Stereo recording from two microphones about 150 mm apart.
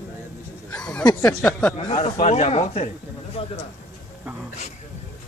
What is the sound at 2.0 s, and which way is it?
A man's voice, 55° left (ahead or behind).